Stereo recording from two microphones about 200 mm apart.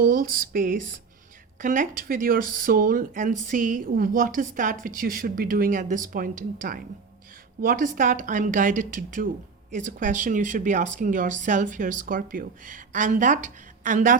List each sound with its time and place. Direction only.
0.0 s speech: 45° right (ahead or behind)